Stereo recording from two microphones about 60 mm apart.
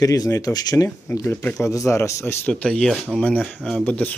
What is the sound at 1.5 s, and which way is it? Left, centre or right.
Speech, left.